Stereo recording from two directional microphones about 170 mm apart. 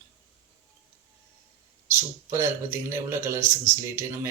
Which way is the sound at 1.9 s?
15° right (ahead or behind).